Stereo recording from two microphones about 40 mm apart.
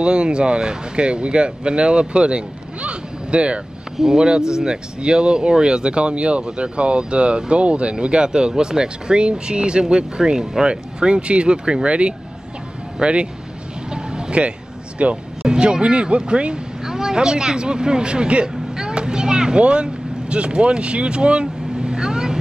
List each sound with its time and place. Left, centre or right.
0.0 s speech: right
4.0 s speech: centre
13.8 s vehicle: right
15.0 s speech: right
15.4 s speech: centre
16.8 s speech: centre